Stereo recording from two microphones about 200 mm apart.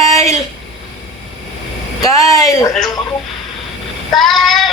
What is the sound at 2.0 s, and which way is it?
Speech, 15° left (ahead or behind).